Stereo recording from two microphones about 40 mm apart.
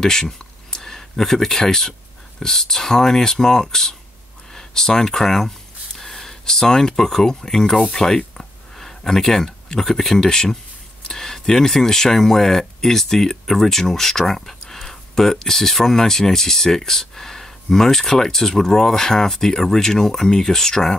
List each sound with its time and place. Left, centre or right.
0.0 s speech: centre